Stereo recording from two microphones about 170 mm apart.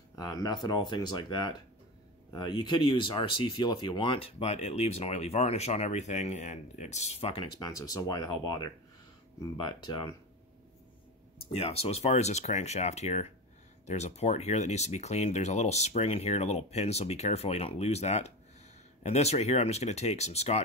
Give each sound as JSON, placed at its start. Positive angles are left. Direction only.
{"t": 0.1, "sound": "speech", "side_deg": 20}
{"t": 7.5, "sound": "speech", "side_deg": 20}
{"t": 11.5, "sound": "speech", "side_deg": 35}